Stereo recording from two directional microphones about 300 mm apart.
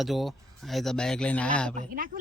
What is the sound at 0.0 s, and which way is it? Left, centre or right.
Speech, centre.